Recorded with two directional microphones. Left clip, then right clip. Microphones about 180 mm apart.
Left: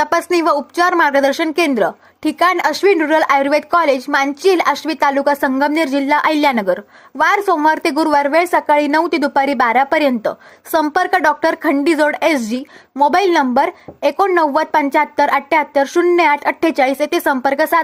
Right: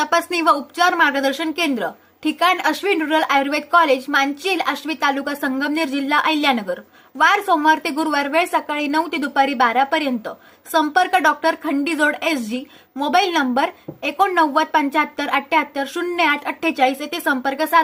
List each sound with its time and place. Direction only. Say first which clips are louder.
0.0 s speech: left 3 dB; 50° left (ahead or behind)